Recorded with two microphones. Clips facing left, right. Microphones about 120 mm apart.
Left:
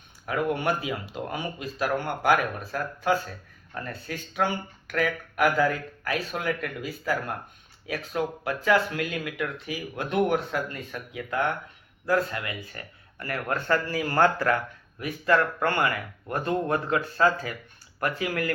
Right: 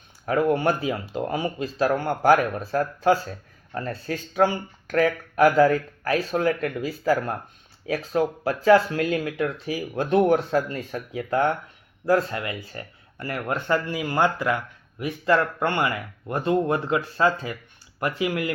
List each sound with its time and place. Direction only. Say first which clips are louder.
0.3 s speech: right 5 dB; 35° right (ahead or behind)